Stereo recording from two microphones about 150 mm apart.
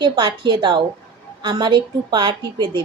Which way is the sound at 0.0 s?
30° right (ahead or behind).